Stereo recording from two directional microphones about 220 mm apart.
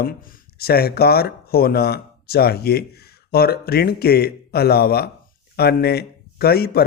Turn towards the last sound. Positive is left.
turn(degrees=45)  # may be behind; listen again after turning